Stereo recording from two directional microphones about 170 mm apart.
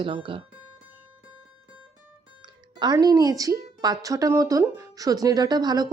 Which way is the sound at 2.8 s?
25° right (ahead or behind).